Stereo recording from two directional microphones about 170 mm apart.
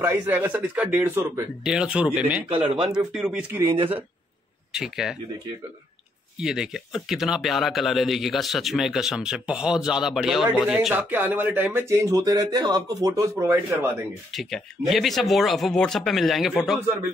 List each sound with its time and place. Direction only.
0.0 s a man's voice: 10° right (ahead or behind)
1.6 s a man's voice: 5° right (ahead or behind)
2.5 s speech: 35° right (ahead or behind)
3.1 s speech: 5° right (ahead or behind)
3.6 s speech: 30° right (ahead or behind)
4.7 s speech: 5° right (ahead or behind)
6.3 s speech: 5° right (ahead or behind)
14.3 s speech: centre (ahead or behind)